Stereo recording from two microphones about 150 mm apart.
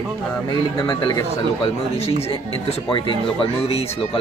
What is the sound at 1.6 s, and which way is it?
Speech, 40° left (ahead or behind).